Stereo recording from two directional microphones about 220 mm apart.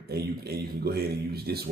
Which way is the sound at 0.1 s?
45° right (ahead or behind).